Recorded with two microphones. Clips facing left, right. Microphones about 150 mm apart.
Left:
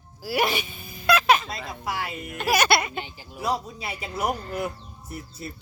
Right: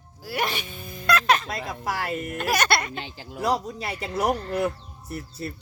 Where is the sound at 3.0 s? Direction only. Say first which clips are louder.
Right 4 dB; 90° right.